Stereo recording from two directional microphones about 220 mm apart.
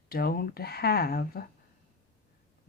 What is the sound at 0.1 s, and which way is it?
Speech, 45° left (ahead or behind).